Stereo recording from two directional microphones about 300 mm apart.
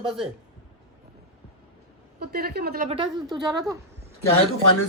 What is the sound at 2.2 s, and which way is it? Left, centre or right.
A man's voice, right.